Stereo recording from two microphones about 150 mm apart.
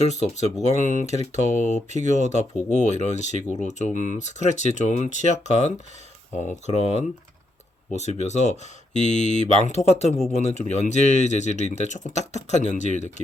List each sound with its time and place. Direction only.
0.1 s speech: 50° left (ahead or behind)